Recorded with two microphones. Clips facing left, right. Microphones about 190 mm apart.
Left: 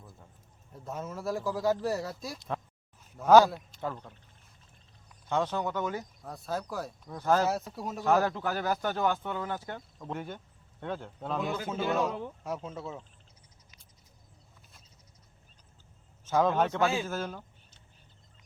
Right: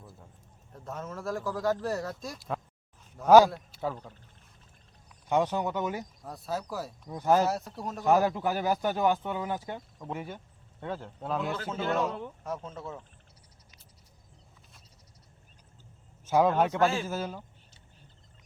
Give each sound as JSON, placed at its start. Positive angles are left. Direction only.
{"t": 0.7, "sound": "speech", "side_deg": 5}
{"t": 3.2, "sound": "speech", "side_deg": -10}
{"t": 5.3, "sound": "speech", "side_deg": -15}
{"t": 6.2, "sound": "speech", "side_deg": 0}
{"t": 7.1, "sound": "speech", "side_deg": -15}
{"t": 7.4, "sound": "speech", "side_deg": 0}
{"t": 8.0, "sound": "speech", "side_deg": -15}
{"t": 11.5, "sound": "speech", "side_deg": 10}
{"t": 16.3, "sound": "speech", "side_deg": -10}